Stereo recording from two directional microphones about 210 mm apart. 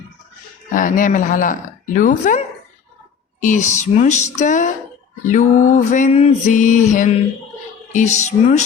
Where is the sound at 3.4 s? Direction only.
35° left (ahead or behind).